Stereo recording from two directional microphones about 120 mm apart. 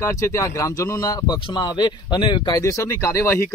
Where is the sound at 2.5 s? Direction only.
25° left (ahead or behind).